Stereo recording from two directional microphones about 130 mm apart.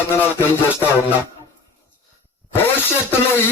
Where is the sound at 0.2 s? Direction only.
15° left (ahead or behind).